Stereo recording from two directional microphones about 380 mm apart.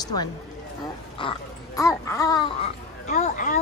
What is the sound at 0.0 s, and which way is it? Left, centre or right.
Speech, centre.